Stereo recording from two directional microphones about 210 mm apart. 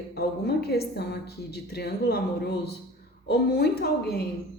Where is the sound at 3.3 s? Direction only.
50° left (ahead or behind).